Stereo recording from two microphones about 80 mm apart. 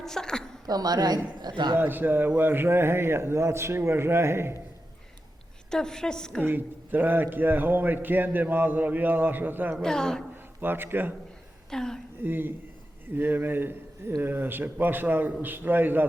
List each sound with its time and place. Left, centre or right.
0.0 s a sound: centre
0.7 s a woman's voice: right
1.7 s a man's voice: right
5.7 s a woman's voice: centre
6.4 s a man's voice: right
9.8 s a woman's voice: centre
10.6 s a man's voice: right
11.7 s a woman's voice: centre
12.2 s a man's voice: right